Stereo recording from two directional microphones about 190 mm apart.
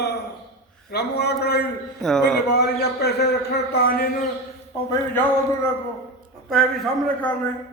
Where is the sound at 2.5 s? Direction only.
60° left (ahead or behind).